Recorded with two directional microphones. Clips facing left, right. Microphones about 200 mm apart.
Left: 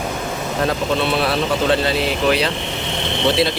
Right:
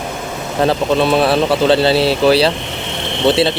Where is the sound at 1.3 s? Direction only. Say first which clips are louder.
Right 5 dB; 30° right (ahead or behind).